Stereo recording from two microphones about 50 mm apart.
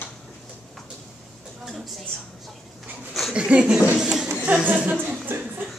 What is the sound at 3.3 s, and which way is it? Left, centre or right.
Speech, right.